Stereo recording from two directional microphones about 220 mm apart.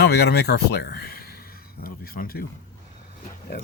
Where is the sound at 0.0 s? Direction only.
45° left (ahead or behind).